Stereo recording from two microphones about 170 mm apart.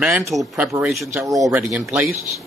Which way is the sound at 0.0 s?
Centre (ahead or behind).